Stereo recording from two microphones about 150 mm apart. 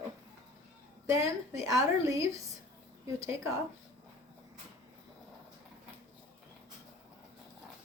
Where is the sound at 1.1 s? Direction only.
20° right (ahead or behind).